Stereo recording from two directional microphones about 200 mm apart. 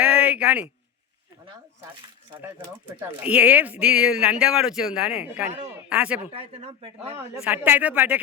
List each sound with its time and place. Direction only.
0.0 s a sound: 5° right (ahead or behind)
3.0 s a man's voice: 10° right (ahead or behind)
6.3 s speech: 30° right (ahead or behind)
7.2 s a man's voice: 10° right (ahead or behind)